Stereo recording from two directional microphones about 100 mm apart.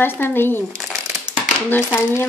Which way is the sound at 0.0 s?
20° left (ahead or behind).